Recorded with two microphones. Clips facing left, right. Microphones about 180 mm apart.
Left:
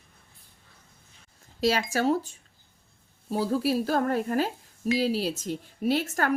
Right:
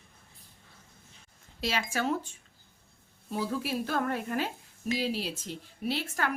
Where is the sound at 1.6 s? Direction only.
40° left (ahead or behind).